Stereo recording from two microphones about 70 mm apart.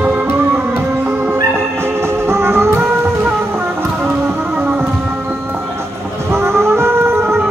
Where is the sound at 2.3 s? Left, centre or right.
Right.